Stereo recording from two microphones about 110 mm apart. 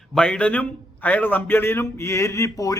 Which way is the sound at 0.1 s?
5° left (ahead or behind).